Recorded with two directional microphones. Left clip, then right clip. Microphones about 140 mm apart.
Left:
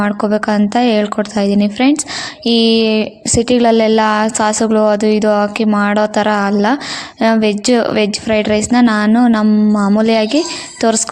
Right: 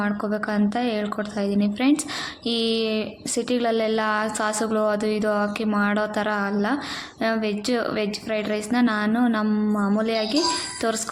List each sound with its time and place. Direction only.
0.0 s a woman's voice: 55° left (ahead or behind)